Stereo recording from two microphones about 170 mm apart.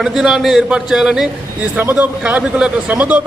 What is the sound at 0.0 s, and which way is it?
A man's voice, 5° right (ahead or behind).